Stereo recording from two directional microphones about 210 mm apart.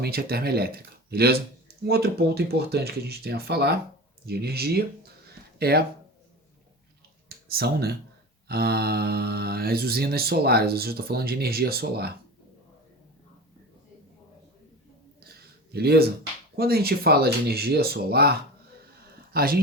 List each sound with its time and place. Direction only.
0.0 s speech: 50° right (ahead or behind)
7.3 s speech: 50° right (ahead or behind)
15.4 s a sound: 50° right (ahead or behind)
16.6 s speech: 45° right (ahead or behind)